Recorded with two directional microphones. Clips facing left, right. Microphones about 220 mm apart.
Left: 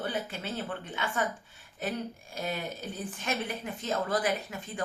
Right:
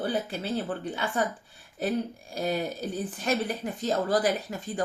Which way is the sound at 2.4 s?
35° right (ahead or behind).